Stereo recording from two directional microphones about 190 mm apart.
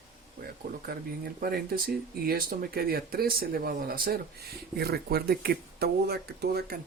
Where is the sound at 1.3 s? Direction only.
50° right (ahead or behind).